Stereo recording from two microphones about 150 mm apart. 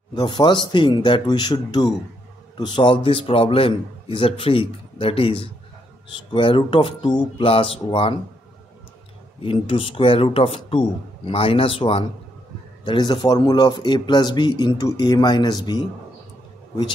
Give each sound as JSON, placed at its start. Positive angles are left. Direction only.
{"t": 0.1, "sound": "a man's voice", "side_deg": 30}
{"t": 9.4, "sound": "a man's voice", "side_deg": 35}